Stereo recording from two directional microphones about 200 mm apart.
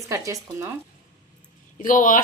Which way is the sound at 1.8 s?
40° left (ahead or behind).